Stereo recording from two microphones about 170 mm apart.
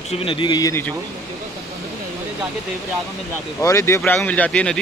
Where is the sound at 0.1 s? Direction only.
30° left (ahead or behind).